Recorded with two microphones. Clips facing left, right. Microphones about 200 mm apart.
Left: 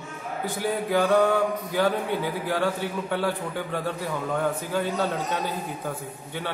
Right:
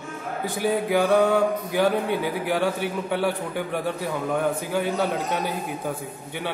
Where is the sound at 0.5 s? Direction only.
15° right (ahead or behind).